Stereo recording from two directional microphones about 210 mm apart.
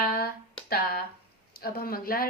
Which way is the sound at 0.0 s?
45° left (ahead or behind).